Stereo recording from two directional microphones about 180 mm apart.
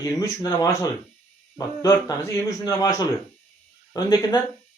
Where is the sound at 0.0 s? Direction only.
20° left (ahead or behind).